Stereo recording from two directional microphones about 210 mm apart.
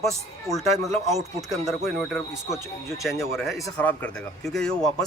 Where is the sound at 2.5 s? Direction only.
15° left (ahead or behind).